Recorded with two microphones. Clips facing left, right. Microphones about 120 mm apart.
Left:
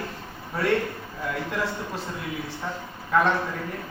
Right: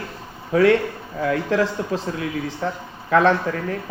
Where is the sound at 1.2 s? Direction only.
90° right.